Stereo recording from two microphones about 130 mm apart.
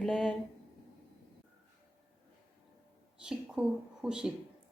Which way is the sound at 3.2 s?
5° right (ahead or behind).